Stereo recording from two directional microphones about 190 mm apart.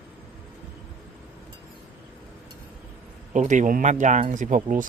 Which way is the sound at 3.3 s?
40° right (ahead or behind).